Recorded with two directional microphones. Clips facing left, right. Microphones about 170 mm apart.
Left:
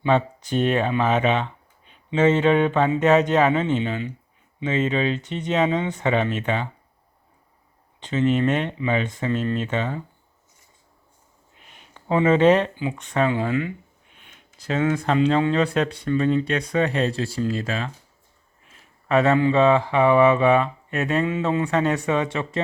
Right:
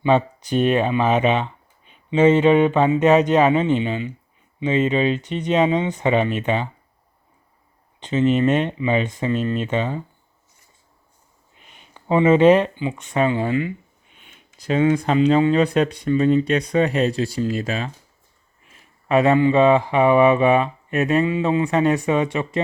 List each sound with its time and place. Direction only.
0.0 s speech: 15° right (ahead or behind)
7.9 s speech: 20° right (ahead or behind)
11.6 s a sound: centre (ahead or behind)
12.0 s speech: 10° right (ahead or behind)
14.6 s speech: 15° right (ahead or behind)
19.0 s speech: 15° right (ahead or behind)